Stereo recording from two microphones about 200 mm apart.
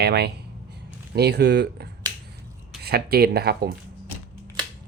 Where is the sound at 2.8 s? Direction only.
50° right (ahead or behind).